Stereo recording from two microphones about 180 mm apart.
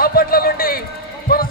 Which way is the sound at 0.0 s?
55° left (ahead or behind).